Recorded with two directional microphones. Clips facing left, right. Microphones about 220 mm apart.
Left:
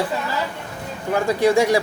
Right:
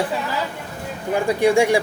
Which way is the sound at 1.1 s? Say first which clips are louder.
Even; 15° right (ahead or behind).